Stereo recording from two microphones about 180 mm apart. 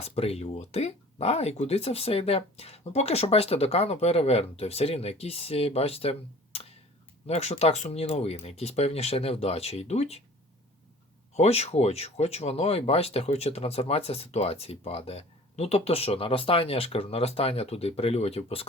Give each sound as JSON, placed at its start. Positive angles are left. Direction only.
{"t": 0.0, "sound": "speech", "side_deg": 35}
{"t": 11.3, "sound": "speech", "side_deg": 35}